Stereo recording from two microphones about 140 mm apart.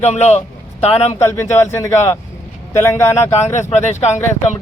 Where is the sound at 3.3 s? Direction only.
55° left (ahead or behind).